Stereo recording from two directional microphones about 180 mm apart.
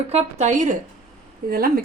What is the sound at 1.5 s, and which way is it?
Speech, 55° right (ahead or behind).